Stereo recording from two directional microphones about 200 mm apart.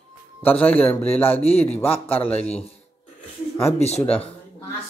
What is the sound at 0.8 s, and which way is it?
A woman's voice, 10° left (ahead or behind).